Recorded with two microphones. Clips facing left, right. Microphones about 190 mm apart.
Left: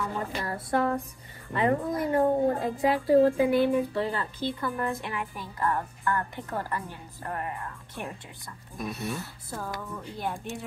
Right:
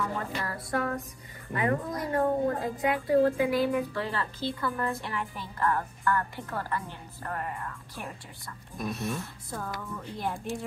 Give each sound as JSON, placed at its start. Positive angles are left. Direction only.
{"t": 0.4, "sound": "a woman's voice", "side_deg": 30}
{"t": 8.7, "sound": "speech", "side_deg": 0}